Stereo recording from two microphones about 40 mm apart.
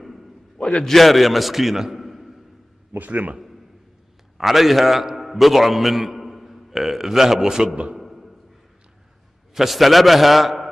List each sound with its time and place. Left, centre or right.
0.8 s a man's voice: centre
3.0 s a man's voice: right
4.4 s a man's voice: centre
8.0 s a sound: centre
9.5 s a man's voice: centre